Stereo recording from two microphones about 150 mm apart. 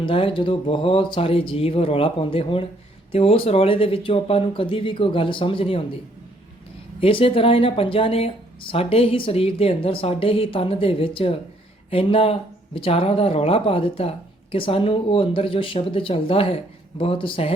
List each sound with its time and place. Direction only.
0.0 s speech: 35° left (ahead or behind)
7.0 s speech: 35° left (ahead or behind)